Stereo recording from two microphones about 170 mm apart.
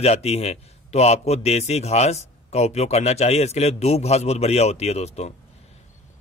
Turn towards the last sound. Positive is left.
turn(degrees=40)  # may be behind; listen again after turning